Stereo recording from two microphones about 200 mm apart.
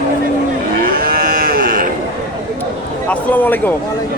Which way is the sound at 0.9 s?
45° right (ahead or behind).